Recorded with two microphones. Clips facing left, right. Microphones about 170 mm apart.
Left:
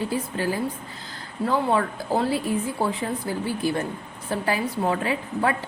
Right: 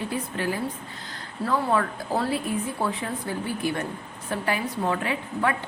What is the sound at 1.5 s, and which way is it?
A woman's voice, 30° left (ahead or behind).